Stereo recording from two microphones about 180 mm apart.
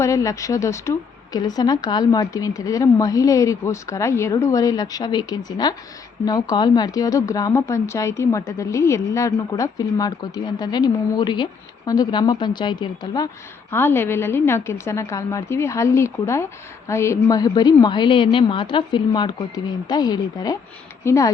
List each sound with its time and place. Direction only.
0.0 s a woman's voice: 15° left (ahead or behind)